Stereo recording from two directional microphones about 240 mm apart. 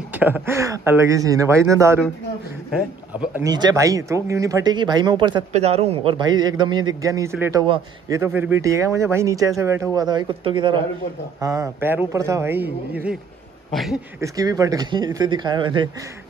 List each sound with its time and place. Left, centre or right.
0.1 s speech: centre
3.3 s speech: centre
7.6 s a man's voice: right
8.2 s speech: centre
13.7 s a sound: centre
14.2 s speech: centre